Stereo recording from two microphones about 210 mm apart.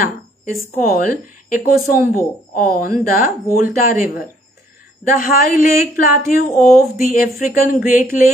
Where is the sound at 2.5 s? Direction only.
40° left (ahead or behind).